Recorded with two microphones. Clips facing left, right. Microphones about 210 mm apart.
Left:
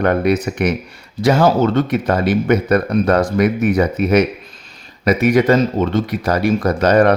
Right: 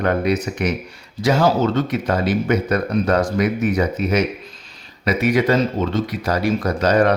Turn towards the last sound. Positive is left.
turn(degrees=55)  # may be behind; listen again after turning